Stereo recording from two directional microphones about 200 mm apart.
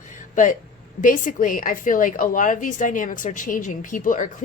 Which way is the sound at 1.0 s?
40° left (ahead or behind).